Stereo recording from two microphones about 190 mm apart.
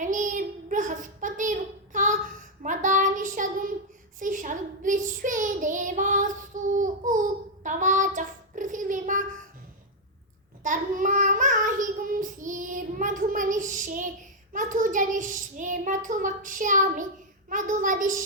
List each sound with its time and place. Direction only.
0.0 s child singing: 40° right (ahead or behind)
10.6 s child singing: 45° right (ahead or behind)